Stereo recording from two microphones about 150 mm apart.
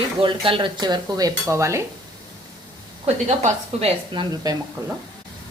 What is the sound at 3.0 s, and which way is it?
Sizzle, 50° right (ahead or behind).